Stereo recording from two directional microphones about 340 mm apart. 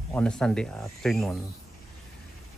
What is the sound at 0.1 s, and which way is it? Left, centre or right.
Speech, centre.